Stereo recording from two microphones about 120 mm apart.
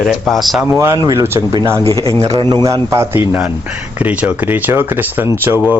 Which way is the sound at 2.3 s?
40° right (ahead or behind).